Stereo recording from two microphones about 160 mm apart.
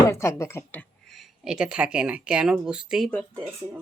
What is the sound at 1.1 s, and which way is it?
Speech, centre (ahead or behind).